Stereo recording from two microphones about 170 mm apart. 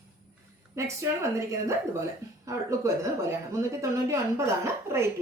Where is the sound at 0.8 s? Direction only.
15° right (ahead or behind).